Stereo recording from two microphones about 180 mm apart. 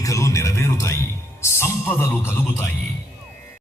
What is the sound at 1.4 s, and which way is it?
Music, 15° left (ahead or behind).